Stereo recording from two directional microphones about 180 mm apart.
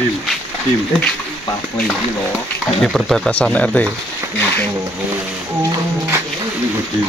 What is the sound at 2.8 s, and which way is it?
Speech, centre (ahead or behind).